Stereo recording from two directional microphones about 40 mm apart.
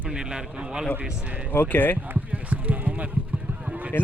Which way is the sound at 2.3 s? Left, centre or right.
Right.